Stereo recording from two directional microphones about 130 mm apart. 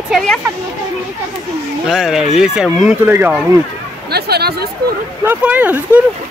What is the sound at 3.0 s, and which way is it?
Speech, 15° right (ahead or behind).